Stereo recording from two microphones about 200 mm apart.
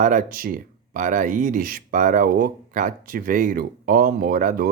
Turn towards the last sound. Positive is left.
turn(degrees=-45)  # may be behind; listen again after turning